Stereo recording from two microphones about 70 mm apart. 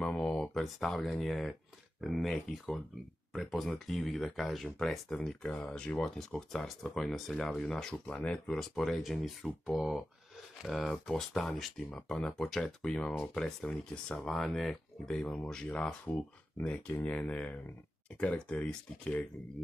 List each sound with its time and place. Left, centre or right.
0.0 s speech: centre
15.3 s speech: centre
16.1 s speech: left